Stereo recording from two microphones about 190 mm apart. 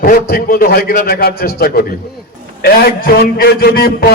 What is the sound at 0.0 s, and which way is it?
A man's voice, 50° left (ahead or behind).